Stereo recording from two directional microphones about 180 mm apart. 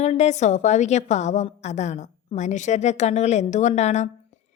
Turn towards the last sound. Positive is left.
turn(degrees=40)  # may be behind; listen again after turning